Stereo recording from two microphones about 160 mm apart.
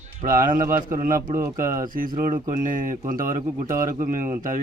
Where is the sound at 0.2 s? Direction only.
55° right (ahead or behind).